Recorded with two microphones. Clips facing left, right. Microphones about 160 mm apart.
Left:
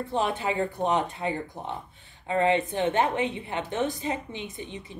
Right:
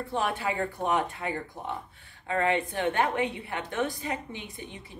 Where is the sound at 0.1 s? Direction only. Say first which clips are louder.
Left 2 dB; 20° left (ahead or behind).